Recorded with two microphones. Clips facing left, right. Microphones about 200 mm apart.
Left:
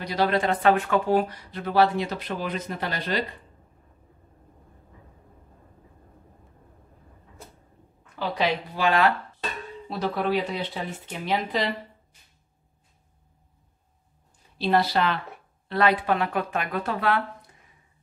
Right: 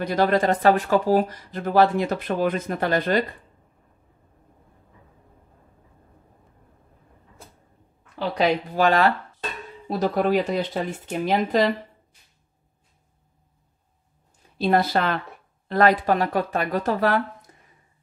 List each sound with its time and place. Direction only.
0.0 s speech: 50° right (ahead or behind)
8.4 s speech: 45° right (ahead or behind)
14.6 s speech: 50° right (ahead or behind)